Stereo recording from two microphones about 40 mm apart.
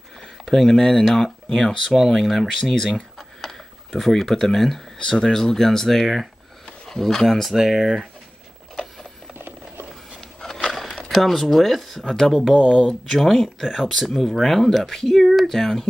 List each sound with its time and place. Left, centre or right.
0.5 s speech: centre
2.6 s speech: centre
3.2 s a sound: centre
5.1 s speech: centre
7.5 s speech: centre
9.3 s ratchet: right
10.7 s a sound: centre
11.1 s speech: centre
13.3 s speech: centre
15.5 s speech: centre